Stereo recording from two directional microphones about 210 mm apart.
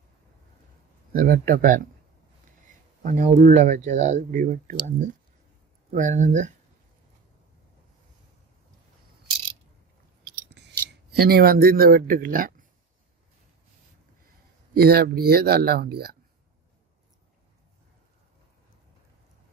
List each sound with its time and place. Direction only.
1.1 s speech: 40° right (ahead or behind)
3.0 s speech: 35° right (ahead or behind)
10.2 s scissors: 55° right (ahead or behind)
14.7 s speech: 45° right (ahead or behind)